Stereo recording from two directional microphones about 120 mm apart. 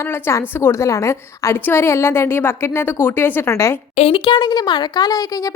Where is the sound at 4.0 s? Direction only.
50° left (ahead or behind); by 5.5 s 30° left (ahead or behind).